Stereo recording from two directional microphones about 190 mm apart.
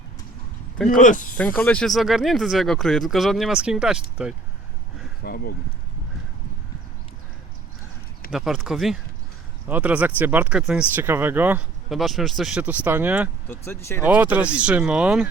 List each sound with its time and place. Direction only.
0.9 s speech: 40° left (ahead or behind)
1.4 s speech: 5° left (ahead or behind)
5.2 s speech: 55° left (ahead or behind)
8.3 s speech: centre (ahead or behind)
13.5 s speech: 10° left (ahead or behind)
14.0 s speech: 10° right (ahead or behind)